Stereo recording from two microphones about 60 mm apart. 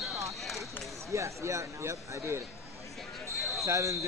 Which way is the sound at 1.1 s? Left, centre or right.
Right.